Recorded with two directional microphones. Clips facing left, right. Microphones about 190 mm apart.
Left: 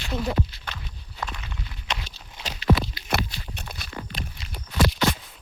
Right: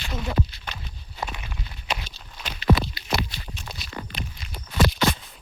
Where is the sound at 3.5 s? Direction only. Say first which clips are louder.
Even; 55° left (ahead or behind).